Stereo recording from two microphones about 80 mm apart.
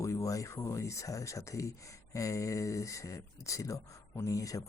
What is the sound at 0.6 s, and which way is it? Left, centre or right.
Speech, left.